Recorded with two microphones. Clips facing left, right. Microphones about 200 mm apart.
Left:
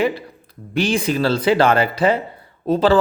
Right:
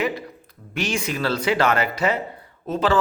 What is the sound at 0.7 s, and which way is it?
Speech, 30° left (ahead or behind).